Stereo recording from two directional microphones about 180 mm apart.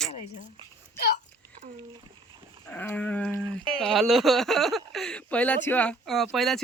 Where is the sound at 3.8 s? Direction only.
Centre (ahead or behind).